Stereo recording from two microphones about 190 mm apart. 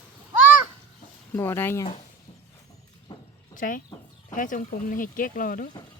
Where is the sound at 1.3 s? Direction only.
10° left (ahead or behind).